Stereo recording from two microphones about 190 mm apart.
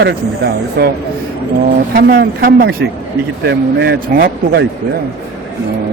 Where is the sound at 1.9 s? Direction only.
55° right (ahead or behind).